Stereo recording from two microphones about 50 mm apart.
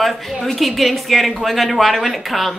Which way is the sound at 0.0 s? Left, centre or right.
Centre.